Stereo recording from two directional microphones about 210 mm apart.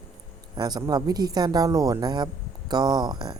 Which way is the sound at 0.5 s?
20° right (ahead or behind).